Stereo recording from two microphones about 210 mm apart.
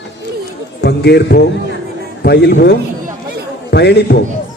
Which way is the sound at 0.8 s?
50° left (ahead or behind).